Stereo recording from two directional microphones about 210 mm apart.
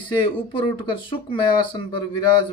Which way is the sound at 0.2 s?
25° left (ahead or behind).